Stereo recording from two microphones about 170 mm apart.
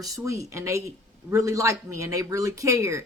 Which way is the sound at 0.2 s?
15° right (ahead or behind).